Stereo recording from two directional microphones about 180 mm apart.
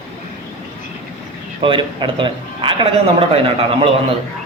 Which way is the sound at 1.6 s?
30° right (ahead or behind).